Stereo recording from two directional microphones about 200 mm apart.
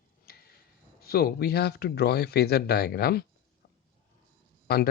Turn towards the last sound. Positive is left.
turn(degrees=50)  # may be behind; listen again after turning